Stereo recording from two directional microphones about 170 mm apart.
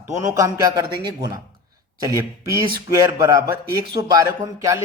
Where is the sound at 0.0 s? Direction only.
15° right (ahead or behind).